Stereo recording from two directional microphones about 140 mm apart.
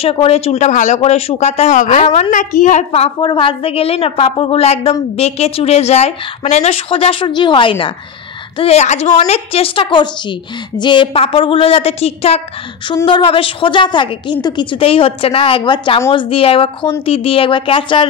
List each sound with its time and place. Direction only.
0.0 s a woman's voice: 45° left (ahead or behind)
8.5 s a woman's voice: 50° left (ahead or behind)